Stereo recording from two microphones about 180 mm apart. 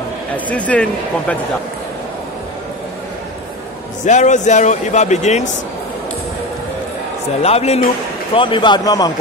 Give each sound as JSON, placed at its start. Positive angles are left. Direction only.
{"t": 0.5, "sound": "speech", "side_deg": 5}
{"t": 4.0, "sound": "a man's voice", "side_deg": 40}
{"t": 7.4, "sound": "a man's voice", "side_deg": 35}